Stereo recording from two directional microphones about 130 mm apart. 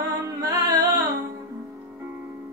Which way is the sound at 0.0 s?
25° right (ahead or behind).